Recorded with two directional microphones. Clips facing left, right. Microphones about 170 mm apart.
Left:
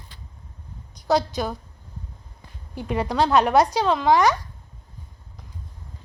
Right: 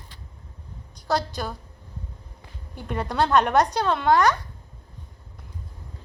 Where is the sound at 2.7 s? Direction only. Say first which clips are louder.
Left 2 dB; 10° left (ahead or behind).